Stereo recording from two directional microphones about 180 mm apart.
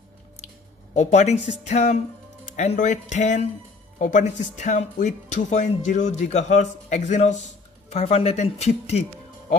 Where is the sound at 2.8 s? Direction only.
40° left (ahead or behind).